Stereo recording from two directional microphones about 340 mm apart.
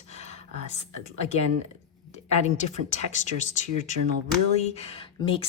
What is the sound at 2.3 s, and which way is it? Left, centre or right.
Speech, centre.